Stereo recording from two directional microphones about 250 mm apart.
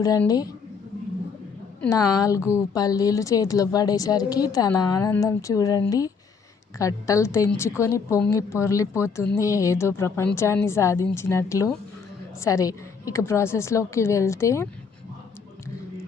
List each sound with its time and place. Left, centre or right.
0.0 s speech: centre
1.8 s speech: centre